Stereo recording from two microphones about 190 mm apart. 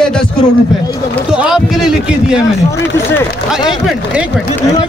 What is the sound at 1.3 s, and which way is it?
A man's voice, 5° right (ahead or behind).